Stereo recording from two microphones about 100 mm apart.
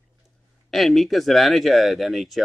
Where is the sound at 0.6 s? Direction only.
Centre (ahead or behind).